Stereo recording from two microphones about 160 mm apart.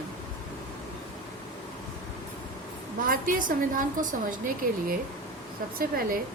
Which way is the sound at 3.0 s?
60° right (ahead or behind).